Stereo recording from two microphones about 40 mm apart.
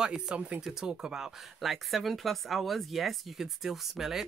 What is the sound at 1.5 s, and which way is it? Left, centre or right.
Speech, centre.